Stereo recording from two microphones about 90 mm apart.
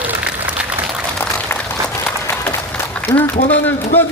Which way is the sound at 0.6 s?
15° right (ahead or behind).